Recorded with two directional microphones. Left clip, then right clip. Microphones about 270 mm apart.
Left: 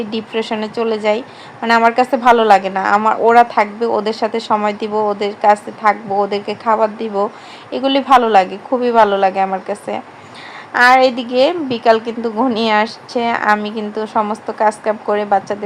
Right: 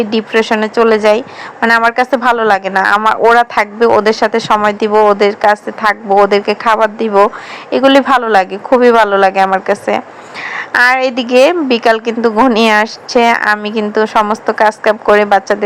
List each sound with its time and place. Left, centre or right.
0.0 s a woman's voice: right